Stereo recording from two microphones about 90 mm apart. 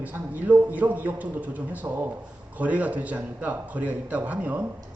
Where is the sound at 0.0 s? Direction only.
20° right (ahead or behind).